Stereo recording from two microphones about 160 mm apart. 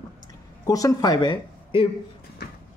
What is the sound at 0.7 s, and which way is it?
Speech, 20° left (ahead or behind).